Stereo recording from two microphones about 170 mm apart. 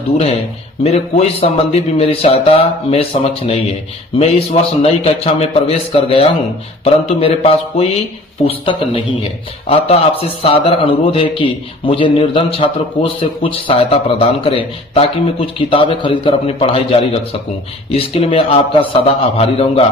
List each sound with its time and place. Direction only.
0.9 s a man's voice: 35° left (ahead or behind)